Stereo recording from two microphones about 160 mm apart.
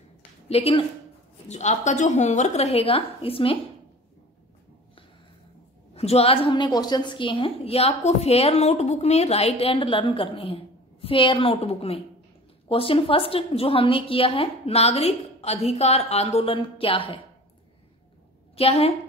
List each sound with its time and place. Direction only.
0.5 s a woman's voice: 40° left (ahead or behind)
5.9 s a woman's voice: 40° left (ahead or behind)
18.6 s a woman's voice: 40° left (ahead or behind)